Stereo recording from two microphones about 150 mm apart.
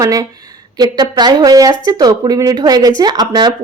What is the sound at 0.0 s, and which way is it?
Speech, 25° right (ahead or behind).